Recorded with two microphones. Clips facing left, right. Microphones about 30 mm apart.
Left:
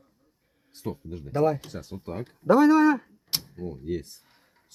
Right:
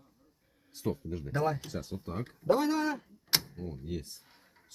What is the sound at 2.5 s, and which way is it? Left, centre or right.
Speech, left.